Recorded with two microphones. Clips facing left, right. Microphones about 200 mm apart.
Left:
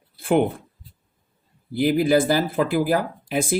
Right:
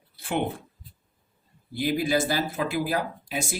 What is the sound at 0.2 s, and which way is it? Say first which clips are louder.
Speech: left 8 dB; 55° left (ahead or behind).